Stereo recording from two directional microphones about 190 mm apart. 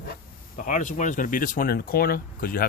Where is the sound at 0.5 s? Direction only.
40° left (ahead or behind).